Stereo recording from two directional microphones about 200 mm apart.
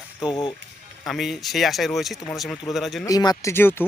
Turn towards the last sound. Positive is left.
turn(degrees=10)  # may be behind; listen again after turning